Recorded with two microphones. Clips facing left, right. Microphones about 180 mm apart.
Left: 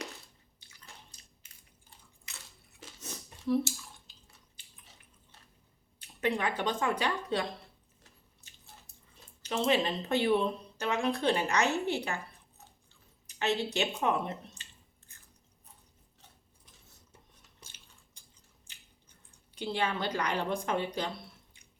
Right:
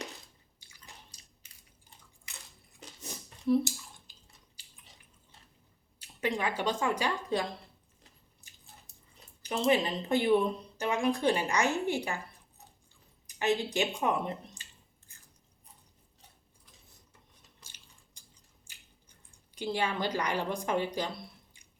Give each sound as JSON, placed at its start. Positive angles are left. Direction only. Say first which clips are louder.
{"t": 3.0, "sound": "chewing", "louder": "right 2 dB", "side_deg": -15}
{"t": 6.1, "sound": "speech", "louder": "left 1 dB", "side_deg": -15}
{"t": 9.4, "sound": "speech", "louder": "right 1 dB", "side_deg": -15}
{"t": 13.4, "sound": "speech", "louder": "right 2 dB", "side_deg": -15}
{"t": 19.5, "sound": "speech", "louder": "right 1 dB", "side_deg": -10}